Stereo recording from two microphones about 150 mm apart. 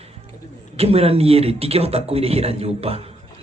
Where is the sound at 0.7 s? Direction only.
40° right (ahead or behind).